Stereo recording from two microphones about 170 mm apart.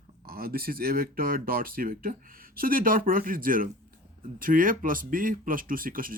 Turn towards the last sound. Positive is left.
turn(degrees=-55)  # may be behind; listen again after turning